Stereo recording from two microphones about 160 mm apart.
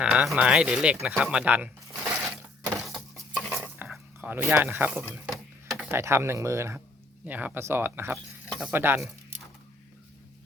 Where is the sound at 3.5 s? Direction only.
5° right (ahead or behind).